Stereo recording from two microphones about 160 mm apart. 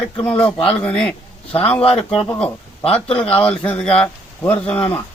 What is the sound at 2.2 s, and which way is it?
Speech, 10° left (ahead or behind).